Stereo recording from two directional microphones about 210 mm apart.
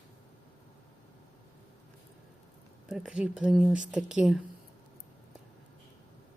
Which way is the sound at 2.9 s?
Centre (ahead or behind).